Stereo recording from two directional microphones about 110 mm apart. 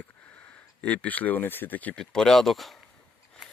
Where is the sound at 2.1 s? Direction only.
5° left (ahead or behind).